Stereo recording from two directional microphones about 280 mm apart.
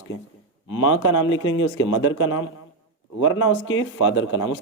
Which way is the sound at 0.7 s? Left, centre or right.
Left.